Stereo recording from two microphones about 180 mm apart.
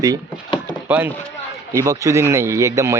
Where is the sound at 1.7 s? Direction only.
15° right (ahead or behind).